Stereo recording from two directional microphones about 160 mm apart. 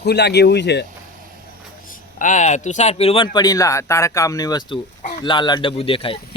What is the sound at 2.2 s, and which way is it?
Speech, 50° left (ahead or behind).